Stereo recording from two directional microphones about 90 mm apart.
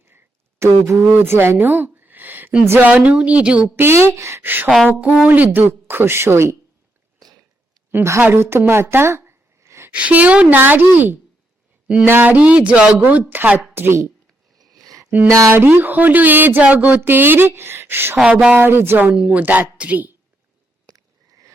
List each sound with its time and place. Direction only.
0.6 s speech: 30° right (ahead or behind)
2.6 s speech: 30° right (ahead or behind)
2.9 s speech: 15° right (ahead or behind)
3.8 s speech: 30° right (ahead or behind)
7.2 s a sound: 45° right (ahead or behind)
7.9 s a woman's voice: 25° right (ahead or behind)
8.2 s a sound: 25° right (ahead or behind)
9.9 s speech: 15° right (ahead or behind)
14.6 s a sound: 45° right (ahead or behind)
15.4 s speech: 30° right (ahead or behind)
18.2 s speech: 15° right (ahead or behind)
19.1 s a woman's voice: 15° right (ahead or behind)
20.9 s a sound: 50° right (ahead or behind)